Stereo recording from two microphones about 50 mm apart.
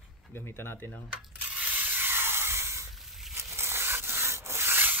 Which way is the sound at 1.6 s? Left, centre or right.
Right.